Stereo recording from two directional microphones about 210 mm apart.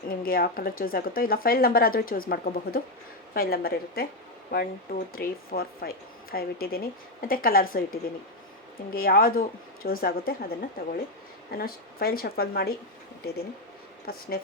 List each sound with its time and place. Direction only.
0.1 s a woman's voice: 45° left (ahead or behind)
8.9 s a woman's voice: 45° left (ahead or behind)
14.1 s a woman's voice: 45° left (ahead or behind)